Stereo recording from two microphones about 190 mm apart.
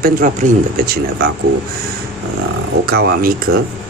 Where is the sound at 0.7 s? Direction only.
55° right (ahead or behind).